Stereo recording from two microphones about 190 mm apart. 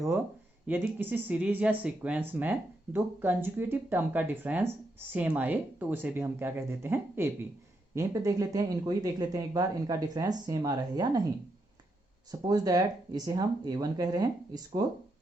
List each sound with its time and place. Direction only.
0.7 s speech: 10° right (ahead or behind)
12.3 s speech: 20° right (ahead or behind)